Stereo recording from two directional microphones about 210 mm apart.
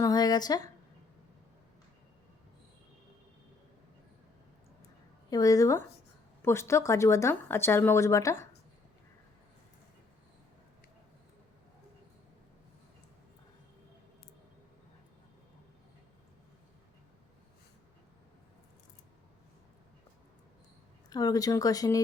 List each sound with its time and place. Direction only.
0.0 s speech: 20° left (ahead or behind)
5.3 s speech: 15° left (ahead or behind)
21.1 s speech: 20° left (ahead or behind)